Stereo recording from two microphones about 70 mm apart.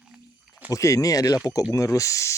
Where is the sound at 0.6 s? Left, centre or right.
Left.